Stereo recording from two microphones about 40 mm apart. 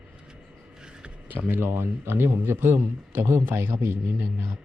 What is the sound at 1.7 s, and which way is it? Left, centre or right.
Speech, right.